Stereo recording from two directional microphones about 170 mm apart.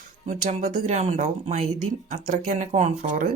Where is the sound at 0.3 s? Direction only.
45° right (ahead or behind).